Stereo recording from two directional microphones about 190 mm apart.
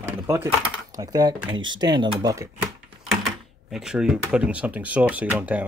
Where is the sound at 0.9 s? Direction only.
20° right (ahead or behind).